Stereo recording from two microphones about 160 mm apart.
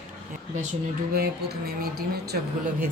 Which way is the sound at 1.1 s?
75° right (ahead or behind).